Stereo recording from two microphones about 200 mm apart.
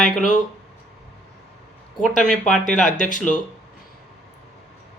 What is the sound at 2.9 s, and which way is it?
Speech, 40° left (ahead or behind).